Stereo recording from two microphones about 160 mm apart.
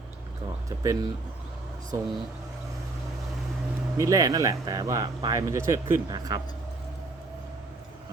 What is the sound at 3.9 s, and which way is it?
Speech, 20° right (ahead or behind).